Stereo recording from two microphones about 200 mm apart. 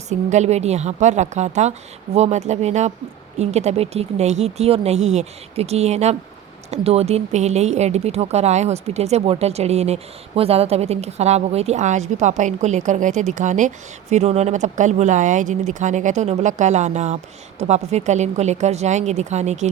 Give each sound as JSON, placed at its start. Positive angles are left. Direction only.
{"t": 0.1, "sound": "speech", "side_deg": -35}